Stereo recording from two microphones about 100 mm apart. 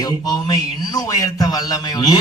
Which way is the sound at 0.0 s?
40° left (ahead or behind).